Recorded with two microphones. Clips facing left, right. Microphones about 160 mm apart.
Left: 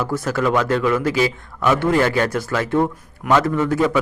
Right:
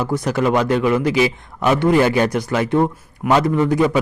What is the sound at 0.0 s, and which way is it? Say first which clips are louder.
A man's voice: right 2 dB; 15° right (ahead or behind).